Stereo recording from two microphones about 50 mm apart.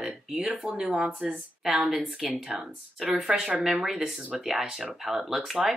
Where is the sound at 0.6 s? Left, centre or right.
Right; by 3.2 s centre.